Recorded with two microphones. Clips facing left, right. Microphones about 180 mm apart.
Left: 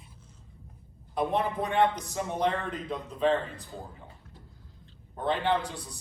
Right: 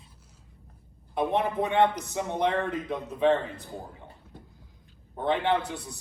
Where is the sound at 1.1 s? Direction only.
20° right (ahead or behind).